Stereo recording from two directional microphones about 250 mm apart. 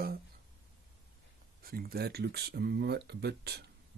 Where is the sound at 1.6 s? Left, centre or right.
Right.